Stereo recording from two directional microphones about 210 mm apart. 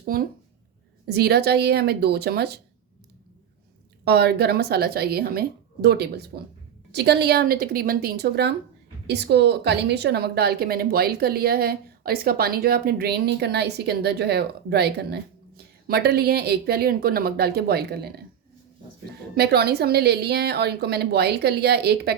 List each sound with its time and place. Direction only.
0.1 s a woman's voice: 45° right (ahead or behind)
4.0 s a woman's voice: 50° right (ahead or behind)
19.4 s a woman's voice: 50° right (ahead or behind)